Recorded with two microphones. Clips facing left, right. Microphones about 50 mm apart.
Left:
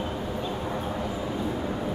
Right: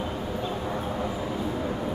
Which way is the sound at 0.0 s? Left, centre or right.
Centre.